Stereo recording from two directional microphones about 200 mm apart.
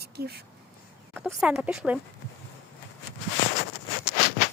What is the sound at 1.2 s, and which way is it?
Speech, 5° right (ahead or behind).